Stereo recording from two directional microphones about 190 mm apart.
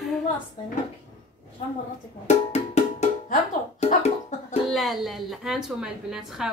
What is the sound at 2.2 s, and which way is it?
Music, 35° left (ahead or behind).